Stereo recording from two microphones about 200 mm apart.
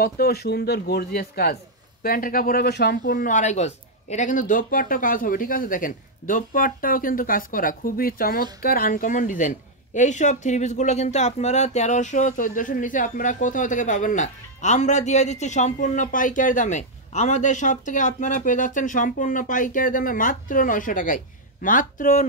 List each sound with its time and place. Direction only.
0.0 s speech: 55° left (ahead or behind)
3.0 s a woman's voice: 40° left (ahead or behind)